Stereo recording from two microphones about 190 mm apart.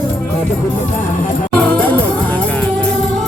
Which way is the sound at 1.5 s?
5° left (ahead or behind).